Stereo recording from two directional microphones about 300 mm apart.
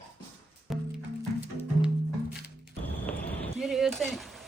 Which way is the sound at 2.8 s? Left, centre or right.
Centre.